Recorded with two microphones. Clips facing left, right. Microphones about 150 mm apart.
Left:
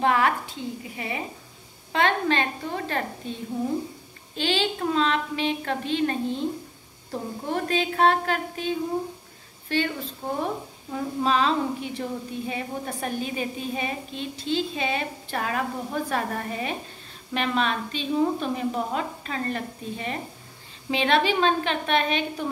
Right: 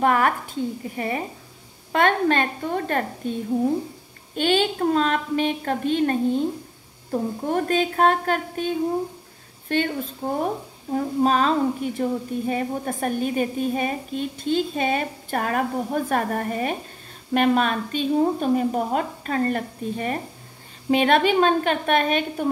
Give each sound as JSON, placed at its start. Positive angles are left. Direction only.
{"t": 0.0, "sound": "a woman's voice", "side_deg": -45}
{"t": 4.4, "sound": "a woman's voice", "side_deg": -50}